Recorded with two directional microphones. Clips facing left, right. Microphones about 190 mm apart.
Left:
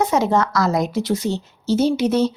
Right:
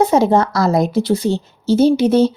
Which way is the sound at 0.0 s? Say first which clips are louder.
Right 5 dB; 30° right (ahead or behind).